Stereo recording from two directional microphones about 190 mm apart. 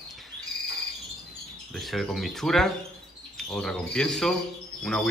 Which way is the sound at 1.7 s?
Centre (ahead or behind).